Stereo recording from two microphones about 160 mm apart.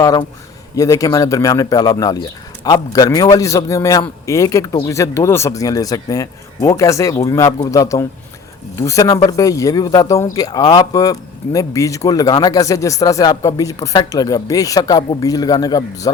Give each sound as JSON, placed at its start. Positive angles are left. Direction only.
{"t": 0.0, "sound": "speech", "side_deg": 25}